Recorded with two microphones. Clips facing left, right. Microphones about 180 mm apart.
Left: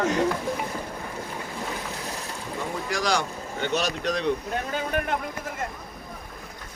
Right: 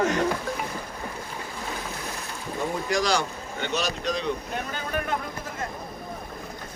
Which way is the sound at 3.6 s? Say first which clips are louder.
Left 2 dB; 60° left (ahead or behind).